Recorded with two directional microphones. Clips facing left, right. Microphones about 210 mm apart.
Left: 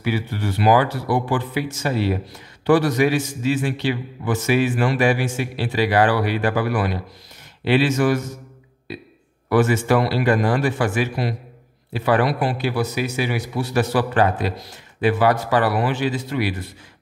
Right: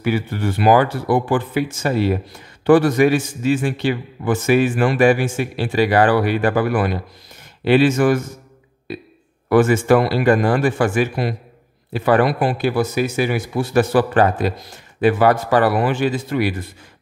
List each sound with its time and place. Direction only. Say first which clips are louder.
0.0 s a man's voice: right 3 dB; 50° right (ahead or behind)
9.5 s a man's voice: right 4 dB; 50° right (ahead or behind)